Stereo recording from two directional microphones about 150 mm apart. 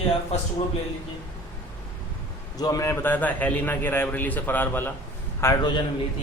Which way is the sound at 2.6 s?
20° left (ahead or behind).